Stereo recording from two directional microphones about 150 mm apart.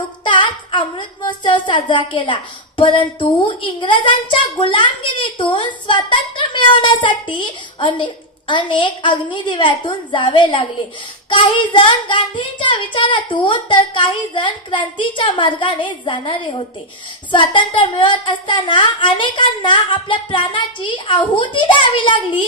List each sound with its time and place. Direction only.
0.2 s speech: 30° left (ahead or behind)
11.7 s speech: 35° left (ahead or behind)